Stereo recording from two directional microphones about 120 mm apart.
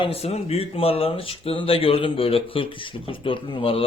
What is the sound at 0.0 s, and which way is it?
Speech, 55° left (ahead or behind).